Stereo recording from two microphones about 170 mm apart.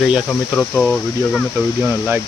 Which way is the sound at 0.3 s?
10° left (ahead or behind).